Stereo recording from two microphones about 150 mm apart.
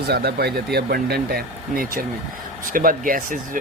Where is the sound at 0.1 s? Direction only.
90° right.